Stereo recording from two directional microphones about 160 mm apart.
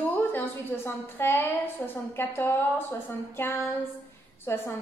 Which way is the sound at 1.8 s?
10° left (ahead or behind).